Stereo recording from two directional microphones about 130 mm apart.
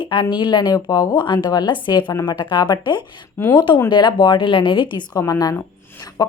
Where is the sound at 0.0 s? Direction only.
35° left (ahead or behind).